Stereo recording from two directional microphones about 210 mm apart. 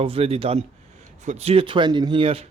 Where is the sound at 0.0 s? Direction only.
25° right (ahead or behind).